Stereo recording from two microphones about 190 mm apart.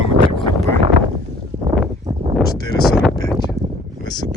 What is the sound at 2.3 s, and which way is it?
Speech, centre (ahead or behind).